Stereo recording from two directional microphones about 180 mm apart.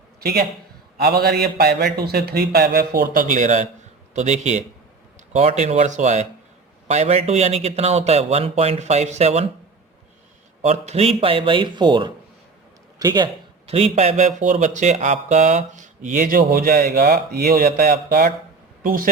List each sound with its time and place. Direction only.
0.2 s a man's voice: 60° right (ahead or behind); by 9.5 s 35° right (ahead or behind)
10.6 s speech: 40° right (ahead or behind)